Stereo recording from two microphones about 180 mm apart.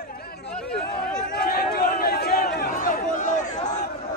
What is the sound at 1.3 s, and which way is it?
Crowd, 60° left (ahead or behind).